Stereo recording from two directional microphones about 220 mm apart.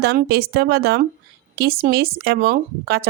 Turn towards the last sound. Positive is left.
turn(degrees=-45)  # may be behind; listen again after turning